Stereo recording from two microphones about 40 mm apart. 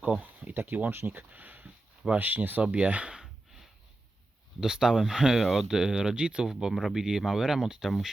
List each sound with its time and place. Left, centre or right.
0.2 s speech: right
2.6 s speech: right
3.1 s a sound: centre
4.6 s speech: centre
6.1 s speech: right
6.5 s speech: centre
7.9 s speech: centre